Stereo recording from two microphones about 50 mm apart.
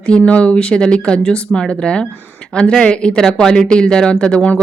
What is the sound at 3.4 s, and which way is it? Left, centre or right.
Speech, centre.